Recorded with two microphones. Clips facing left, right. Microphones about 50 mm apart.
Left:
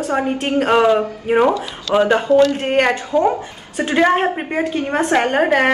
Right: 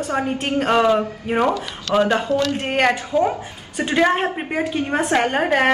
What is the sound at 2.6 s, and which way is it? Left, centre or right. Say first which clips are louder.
A woman's voice: left 3 dB; centre.